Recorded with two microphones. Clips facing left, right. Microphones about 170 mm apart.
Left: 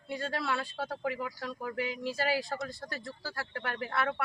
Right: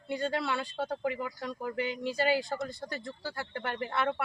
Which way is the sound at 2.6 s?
25° right (ahead or behind).